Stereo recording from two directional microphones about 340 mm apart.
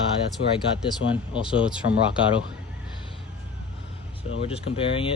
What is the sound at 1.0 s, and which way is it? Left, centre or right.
Speech, left.